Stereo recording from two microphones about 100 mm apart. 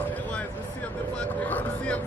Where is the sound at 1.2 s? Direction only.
15° left (ahead or behind).